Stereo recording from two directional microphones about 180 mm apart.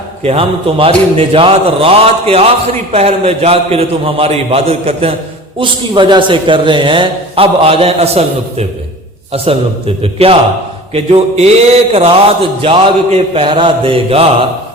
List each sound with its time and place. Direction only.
0.2 s a man's voice: 35° right (ahead or behind)
10.0 s a man's voice: 30° right (ahead or behind)